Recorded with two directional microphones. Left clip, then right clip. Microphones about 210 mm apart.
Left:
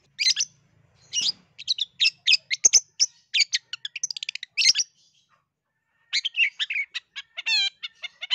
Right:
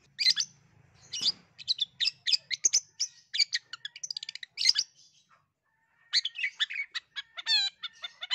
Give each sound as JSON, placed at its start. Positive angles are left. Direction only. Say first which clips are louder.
{"t": 0.1, "sound": "bird", "louder": "left 3 dB", "side_deg": 15}
{"t": 6.0, "sound": "bird", "louder": "left 7 dB", "side_deg": 15}